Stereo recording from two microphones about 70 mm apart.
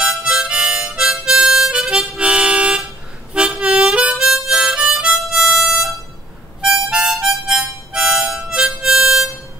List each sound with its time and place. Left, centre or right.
0.0 s harmonica: centre